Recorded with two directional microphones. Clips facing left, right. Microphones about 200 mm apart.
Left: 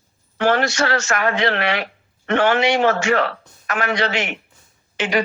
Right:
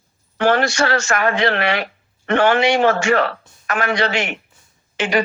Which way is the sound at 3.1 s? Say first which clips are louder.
Right 2 dB; 45° right (ahead or behind).